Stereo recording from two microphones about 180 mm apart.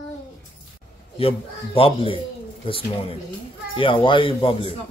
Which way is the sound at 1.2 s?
30° left (ahead or behind).